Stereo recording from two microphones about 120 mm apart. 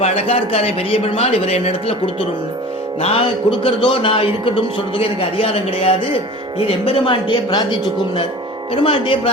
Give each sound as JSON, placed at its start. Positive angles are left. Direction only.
{"t": 0.0, "sound": "a man's voice", "side_deg": 55}
{"t": 3.0, "sound": "a man's voice", "side_deg": 50}
{"t": 8.7, "sound": "a man's voice", "side_deg": 50}